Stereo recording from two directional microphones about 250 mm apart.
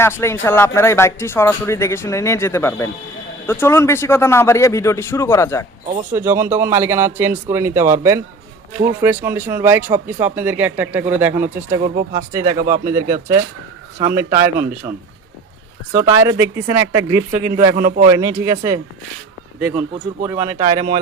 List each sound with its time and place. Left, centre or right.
0.0 s speech: centre
6.1 s speech: centre
12.5 s speech: right
12.8 s speech: centre
15.9 s speech: centre
17.7 s a man's voice: right
18.0 s speech: centre
20.7 s speech: right